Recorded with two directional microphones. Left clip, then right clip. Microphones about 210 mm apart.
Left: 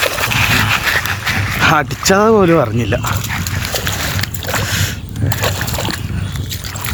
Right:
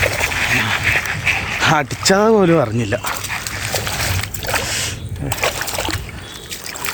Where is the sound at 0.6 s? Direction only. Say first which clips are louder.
Left 2 dB; 35° left (ahead or behind).